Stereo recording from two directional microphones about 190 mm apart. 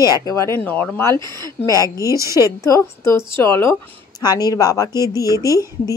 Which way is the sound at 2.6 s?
15° left (ahead or behind).